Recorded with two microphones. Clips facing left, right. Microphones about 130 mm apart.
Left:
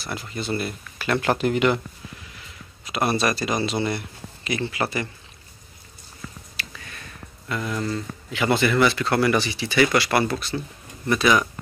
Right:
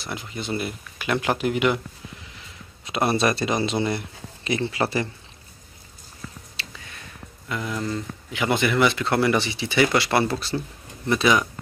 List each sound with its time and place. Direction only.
0.0 s speech: 20° right (ahead or behind)
2.8 s speech: 25° right (ahead or behind)
6.5 s a sound: 25° right (ahead or behind)
7.4 s speech: 15° right (ahead or behind)